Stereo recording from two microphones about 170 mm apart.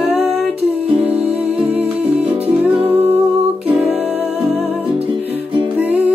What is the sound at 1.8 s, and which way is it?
Music, 10° right (ahead or behind).